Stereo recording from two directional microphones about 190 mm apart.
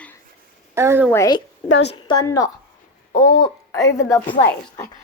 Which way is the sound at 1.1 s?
20° left (ahead or behind).